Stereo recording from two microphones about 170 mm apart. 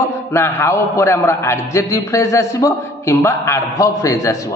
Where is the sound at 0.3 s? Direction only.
15° left (ahead or behind).